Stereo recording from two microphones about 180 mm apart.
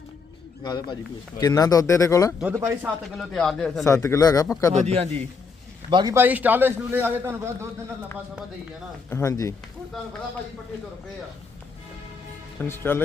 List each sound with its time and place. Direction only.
1.4 s speech: 20° left (ahead or behind)
2.4 s a man's voice: 10° right (ahead or behind)
3.2 s speech: centre (ahead or behind)
3.8 s speech: 15° left (ahead or behind)
4.7 s a man's voice: 35° right (ahead or behind)
5.9 s a man's voice: 25° right (ahead or behind)
6.1 s a man's voice: 10° right (ahead or behind)
9.0 s speech: 15° left (ahead or behind)
12.5 s speech: 10° left (ahead or behind)